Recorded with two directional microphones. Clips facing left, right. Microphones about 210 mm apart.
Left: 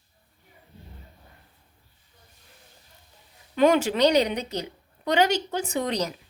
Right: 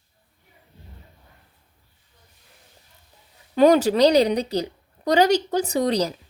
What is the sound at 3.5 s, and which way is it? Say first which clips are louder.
A woman's voice: right 4 dB; 35° right (ahead or behind).